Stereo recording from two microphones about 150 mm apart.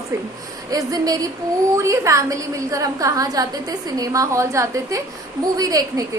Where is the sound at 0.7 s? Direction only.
25° right (ahead or behind).